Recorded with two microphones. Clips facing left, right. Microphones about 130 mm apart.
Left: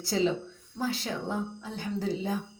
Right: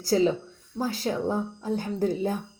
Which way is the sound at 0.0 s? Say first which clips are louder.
Right 5 dB; 40° right (ahead or behind).